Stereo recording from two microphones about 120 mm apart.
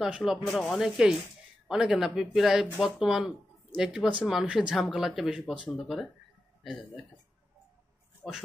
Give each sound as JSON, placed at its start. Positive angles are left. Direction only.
{"t": 0.0, "sound": "speech", "side_deg": -5}